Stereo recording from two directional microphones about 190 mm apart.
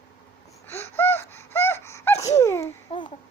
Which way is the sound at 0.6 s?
10° left (ahead or behind).